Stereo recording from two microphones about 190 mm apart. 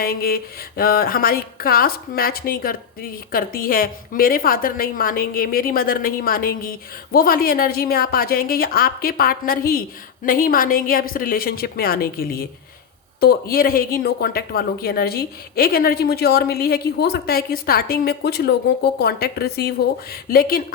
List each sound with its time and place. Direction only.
0.0 s a woman's voice: 50° left (ahead or behind)